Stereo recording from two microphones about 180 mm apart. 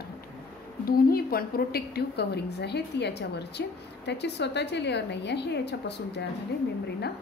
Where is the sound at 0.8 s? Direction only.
55° left (ahead or behind).